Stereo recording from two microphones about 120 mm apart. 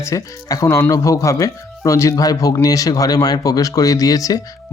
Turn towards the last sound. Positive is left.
turn(degrees=30)  # may be behind; listen again after turning